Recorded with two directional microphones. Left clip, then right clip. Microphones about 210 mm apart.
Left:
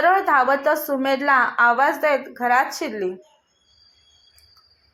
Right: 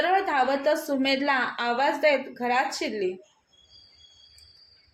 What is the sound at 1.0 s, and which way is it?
Speech, 10° left (ahead or behind).